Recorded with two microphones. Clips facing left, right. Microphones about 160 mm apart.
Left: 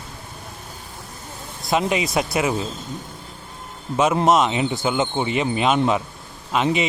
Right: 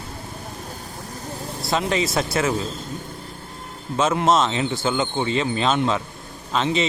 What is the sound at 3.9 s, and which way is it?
Speech, 15° left (ahead or behind).